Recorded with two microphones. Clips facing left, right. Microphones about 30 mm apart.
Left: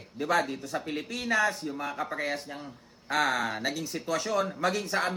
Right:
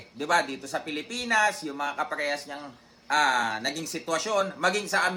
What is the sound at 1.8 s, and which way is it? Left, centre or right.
Speech, right.